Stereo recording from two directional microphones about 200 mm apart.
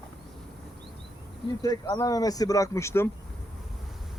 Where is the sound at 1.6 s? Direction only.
20° left (ahead or behind).